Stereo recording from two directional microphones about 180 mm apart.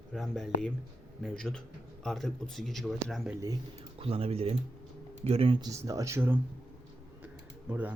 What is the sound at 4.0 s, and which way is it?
Speech, 30° right (ahead or behind).